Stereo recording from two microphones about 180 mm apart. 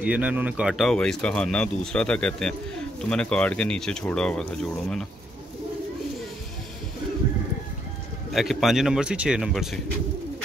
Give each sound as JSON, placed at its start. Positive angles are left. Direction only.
{"t": 0.0, "sound": "speech", "side_deg": -5}
{"t": 8.3, "sound": "speech", "side_deg": 0}